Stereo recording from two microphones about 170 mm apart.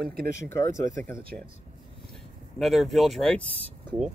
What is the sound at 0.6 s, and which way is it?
Speech, 15° left (ahead or behind).